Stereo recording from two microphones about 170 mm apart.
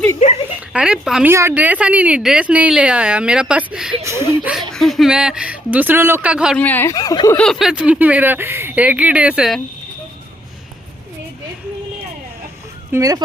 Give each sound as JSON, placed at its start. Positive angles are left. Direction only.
{"t": 0.2, "sound": "speech", "side_deg": 40}
{"t": 0.7, "sound": "speech", "side_deg": -5}
{"t": 4.2, "sound": "speech", "side_deg": -15}
{"t": 4.5, "sound": "speech", "side_deg": 0}
{"t": 6.6, "sound": "speech", "side_deg": 10}
{"t": 6.9, "sound": "speech", "side_deg": 20}
{"t": 7.3, "sound": "speech", "side_deg": 5}
{"t": 12.9, "sound": "speech", "side_deg": -20}